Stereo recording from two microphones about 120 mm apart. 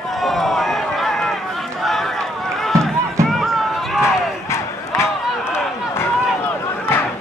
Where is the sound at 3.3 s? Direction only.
Centre (ahead or behind).